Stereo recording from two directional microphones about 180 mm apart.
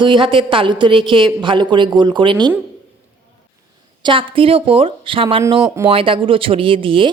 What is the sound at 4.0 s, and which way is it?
A woman's voice, 30° right (ahead or behind).